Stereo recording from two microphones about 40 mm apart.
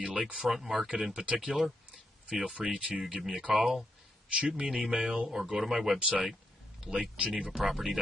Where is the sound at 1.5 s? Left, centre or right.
Right.